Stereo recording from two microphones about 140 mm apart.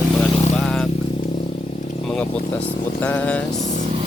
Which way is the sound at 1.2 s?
40° left (ahead or behind).